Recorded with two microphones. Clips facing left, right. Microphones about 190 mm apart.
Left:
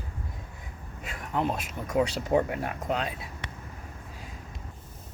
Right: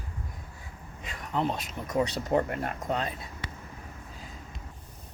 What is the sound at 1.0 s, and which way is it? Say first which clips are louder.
Speech: left 1 dB; 5° left (ahead or behind).